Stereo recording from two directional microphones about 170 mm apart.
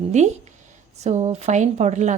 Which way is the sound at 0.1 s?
40° right (ahead or behind).